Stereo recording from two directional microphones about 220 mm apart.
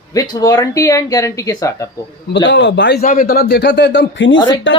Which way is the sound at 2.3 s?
55° left (ahead or behind).